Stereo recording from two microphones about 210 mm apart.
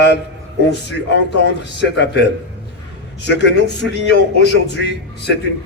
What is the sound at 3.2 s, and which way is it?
A man's voice, 55° left (ahead or behind).